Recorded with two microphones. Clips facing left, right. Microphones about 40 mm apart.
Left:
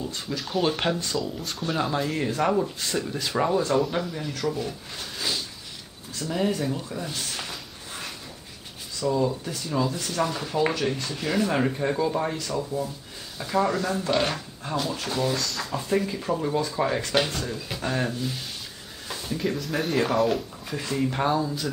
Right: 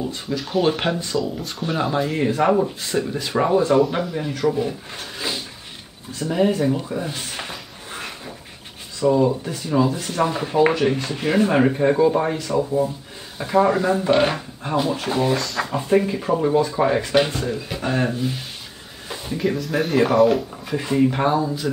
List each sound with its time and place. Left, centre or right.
0.3 s speech: centre
19.0 s a sound: centre
19.4 s speech: centre
20.7 s speech: right